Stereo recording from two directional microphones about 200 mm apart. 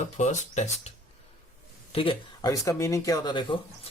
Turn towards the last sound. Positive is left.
turn(degrees=20)  # may be behind; listen again after turning